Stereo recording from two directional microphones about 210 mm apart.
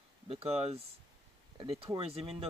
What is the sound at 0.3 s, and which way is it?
Speech, 30° right (ahead or behind).